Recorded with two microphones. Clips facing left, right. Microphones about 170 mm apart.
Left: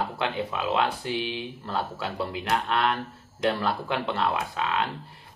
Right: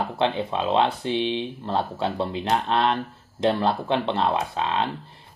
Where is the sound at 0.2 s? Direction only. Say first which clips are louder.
Right 8 dB; 25° right (ahead or behind).